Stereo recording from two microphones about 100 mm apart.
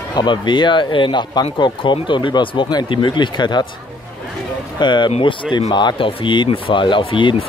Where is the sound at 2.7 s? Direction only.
45° left (ahead or behind).